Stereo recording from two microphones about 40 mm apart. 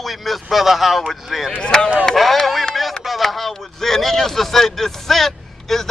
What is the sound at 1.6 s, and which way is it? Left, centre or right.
Speech, centre.